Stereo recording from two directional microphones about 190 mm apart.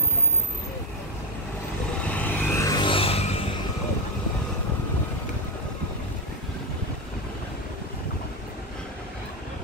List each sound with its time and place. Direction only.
2.0 s vehicle: 10° left (ahead or behind); by 3.3 s 30° left (ahead or behind)